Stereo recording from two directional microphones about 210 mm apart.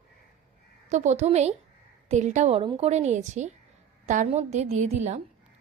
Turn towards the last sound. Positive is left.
turn(degrees=-30)  # may be behind; listen again after turning